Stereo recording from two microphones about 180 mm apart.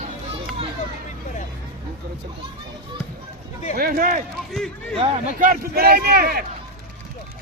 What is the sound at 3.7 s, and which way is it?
Speech, 55° right (ahead or behind).